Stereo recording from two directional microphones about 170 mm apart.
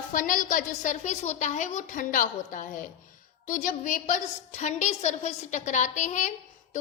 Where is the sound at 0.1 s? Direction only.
50° left (ahead or behind).